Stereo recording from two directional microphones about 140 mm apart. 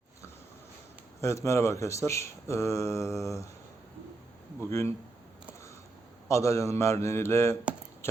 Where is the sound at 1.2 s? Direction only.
20° left (ahead or behind).